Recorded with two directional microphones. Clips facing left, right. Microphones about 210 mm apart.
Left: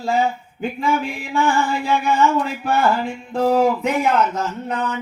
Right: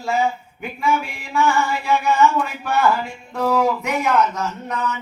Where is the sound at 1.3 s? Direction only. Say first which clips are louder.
Even; 30° left (ahead or behind).